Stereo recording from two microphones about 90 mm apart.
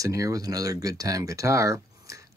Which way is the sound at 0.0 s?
40° right (ahead or behind).